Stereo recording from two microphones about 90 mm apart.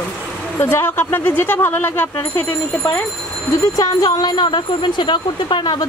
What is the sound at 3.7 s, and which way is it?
A woman's voice, 40° left (ahead or behind).